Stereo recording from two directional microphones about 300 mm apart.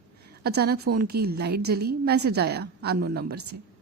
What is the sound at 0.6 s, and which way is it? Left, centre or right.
A woman's voice, right.